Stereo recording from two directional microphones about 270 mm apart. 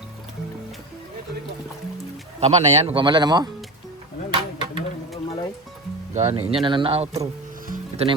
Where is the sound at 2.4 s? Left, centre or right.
Right.